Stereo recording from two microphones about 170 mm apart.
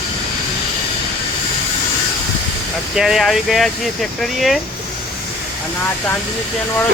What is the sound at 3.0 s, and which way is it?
Speech, centre (ahead or behind).